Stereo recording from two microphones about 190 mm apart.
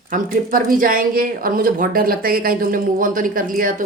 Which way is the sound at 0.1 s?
45° right (ahead or behind).